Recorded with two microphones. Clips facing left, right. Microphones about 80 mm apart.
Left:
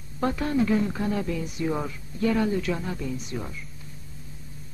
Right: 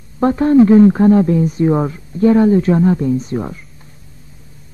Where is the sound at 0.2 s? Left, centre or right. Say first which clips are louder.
Right 13 dB; right.